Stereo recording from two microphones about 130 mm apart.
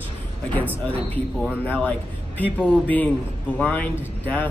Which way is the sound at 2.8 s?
10° left (ahead or behind).